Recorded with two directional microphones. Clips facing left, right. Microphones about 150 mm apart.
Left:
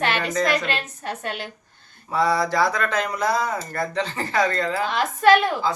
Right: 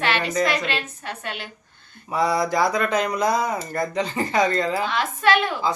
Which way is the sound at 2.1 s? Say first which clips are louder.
Even; 15° right (ahead or behind).